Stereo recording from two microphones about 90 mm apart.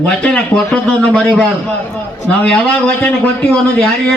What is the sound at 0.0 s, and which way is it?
Speech, 10° left (ahead or behind).